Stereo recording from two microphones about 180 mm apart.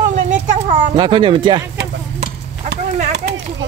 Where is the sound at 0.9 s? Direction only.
25° right (ahead or behind).